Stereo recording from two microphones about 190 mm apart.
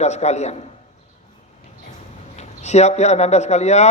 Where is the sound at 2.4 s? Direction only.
35° left (ahead or behind).